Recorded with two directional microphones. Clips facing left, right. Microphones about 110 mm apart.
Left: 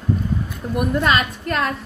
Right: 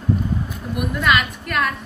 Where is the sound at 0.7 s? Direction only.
30° left (ahead or behind).